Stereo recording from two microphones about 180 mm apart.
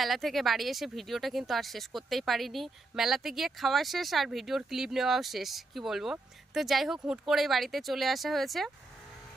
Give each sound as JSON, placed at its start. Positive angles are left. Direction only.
{"t": 0.0, "sound": "speech", "side_deg": 0}